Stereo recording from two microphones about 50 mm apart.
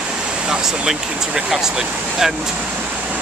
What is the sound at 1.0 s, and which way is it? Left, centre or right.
Speech, centre.